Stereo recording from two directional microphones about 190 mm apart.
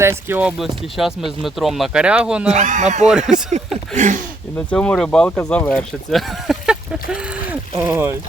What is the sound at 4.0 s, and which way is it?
Speech, 40° right (ahead or behind).